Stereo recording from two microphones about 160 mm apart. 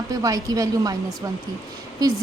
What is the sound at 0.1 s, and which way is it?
Speech, 20° right (ahead or behind).